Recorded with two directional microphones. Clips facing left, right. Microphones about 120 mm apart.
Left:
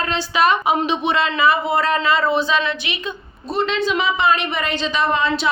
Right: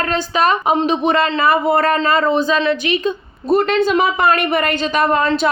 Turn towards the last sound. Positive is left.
turn(degrees=-50)  # may be behind; listen again after turning